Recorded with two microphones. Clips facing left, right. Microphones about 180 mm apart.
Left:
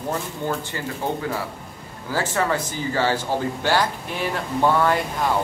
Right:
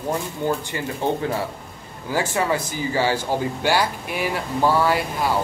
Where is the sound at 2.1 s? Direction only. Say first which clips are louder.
Right 1 dB; 15° right (ahead or behind).